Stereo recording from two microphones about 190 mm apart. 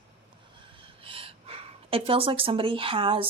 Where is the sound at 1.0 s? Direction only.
30° right (ahead or behind).